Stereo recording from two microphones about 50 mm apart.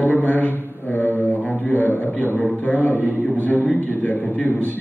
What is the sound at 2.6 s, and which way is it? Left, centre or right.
A man's voice, left.